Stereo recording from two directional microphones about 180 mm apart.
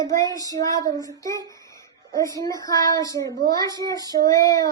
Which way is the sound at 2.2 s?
20° left (ahead or behind).